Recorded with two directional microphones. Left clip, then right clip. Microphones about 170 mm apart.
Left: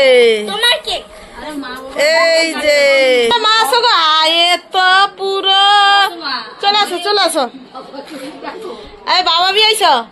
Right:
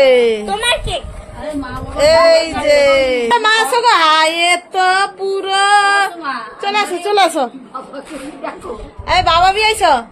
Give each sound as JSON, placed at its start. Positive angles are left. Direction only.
{"t": 0.0, "sound": "a woman's voice", "side_deg": 0}
{"t": 0.5, "sound": "a woman's voice", "side_deg": -40}
{"t": 2.0, "sound": "a woman's voice", "side_deg": 0}
{"t": 7.0, "sound": "a woman's voice", "side_deg": -10}
{"t": 9.0, "sound": "a woman's voice", "side_deg": 0}